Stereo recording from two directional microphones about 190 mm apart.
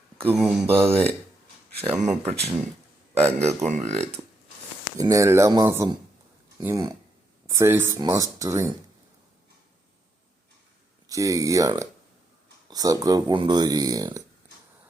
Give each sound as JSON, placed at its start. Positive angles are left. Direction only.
{"t": 0.3, "sound": "speech", "side_deg": 0}
{"t": 2.0, "sound": "speech", "side_deg": -35}
{"t": 4.9, "sound": "speech", "side_deg": -15}
{"t": 11.1, "sound": "speech", "side_deg": -15}